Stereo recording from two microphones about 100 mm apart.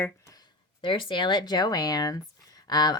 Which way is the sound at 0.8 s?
60° left (ahead or behind).